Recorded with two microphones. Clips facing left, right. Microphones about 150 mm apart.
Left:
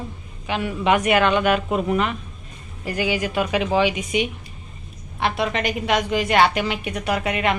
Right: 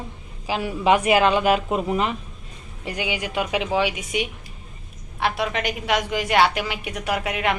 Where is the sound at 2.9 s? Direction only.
15° right (ahead or behind).